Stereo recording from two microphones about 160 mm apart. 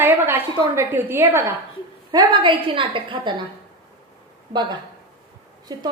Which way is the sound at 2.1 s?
25° right (ahead or behind).